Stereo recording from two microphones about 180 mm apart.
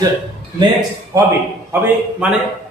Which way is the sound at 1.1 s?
20° right (ahead or behind).